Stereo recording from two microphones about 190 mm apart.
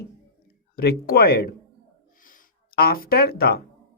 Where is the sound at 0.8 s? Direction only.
50° left (ahead or behind).